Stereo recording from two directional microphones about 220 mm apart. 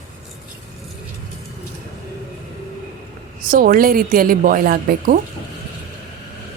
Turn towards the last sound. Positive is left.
turn(degrees=-40)  # may be behind; listen again after turning